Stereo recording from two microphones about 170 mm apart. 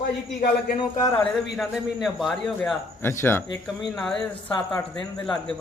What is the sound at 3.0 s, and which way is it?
A man's voice, 15° left (ahead or behind).